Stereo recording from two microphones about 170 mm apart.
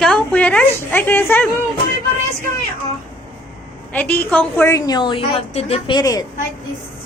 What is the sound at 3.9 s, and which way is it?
A woman's voice, 10° left (ahead or behind).